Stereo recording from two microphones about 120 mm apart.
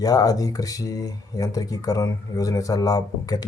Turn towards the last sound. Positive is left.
turn(degrees=30)  # may be behind; listen again after turning